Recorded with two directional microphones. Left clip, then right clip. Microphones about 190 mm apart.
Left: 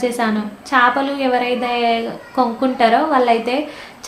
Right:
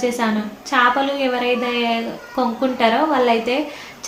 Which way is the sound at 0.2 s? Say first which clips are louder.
Left 1 dB; 20° left (ahead or behind).